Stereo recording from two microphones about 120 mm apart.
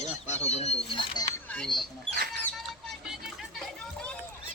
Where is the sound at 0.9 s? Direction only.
45° left (ahead or behind).